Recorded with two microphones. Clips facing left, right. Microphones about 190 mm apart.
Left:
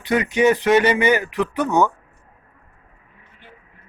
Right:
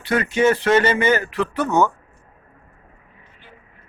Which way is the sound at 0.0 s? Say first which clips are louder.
Left 1 dB; 15° left (ahead or behind).